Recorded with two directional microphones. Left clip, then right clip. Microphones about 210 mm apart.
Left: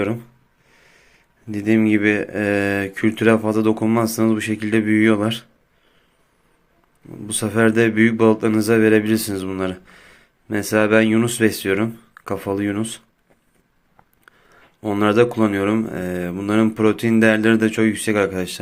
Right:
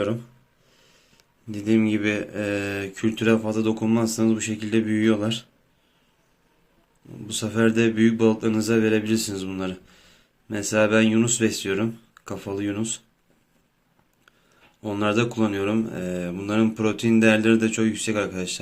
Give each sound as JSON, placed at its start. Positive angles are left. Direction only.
{"t": 0.0, "sound": "speech", "side_deg": 15}
{"t": 0.7, "sound": "a sound", "side_deg": 20}
{"t": 1.5, "sound": "speech", "side_deg": 25}
{"t": 7.3, "sound": "speech", "side_deg": 30}
{"t": 14.3, "sound": "speech", "side_deg": 25}